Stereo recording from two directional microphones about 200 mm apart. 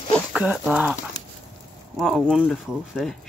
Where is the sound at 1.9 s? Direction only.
Centre (ahead or behind).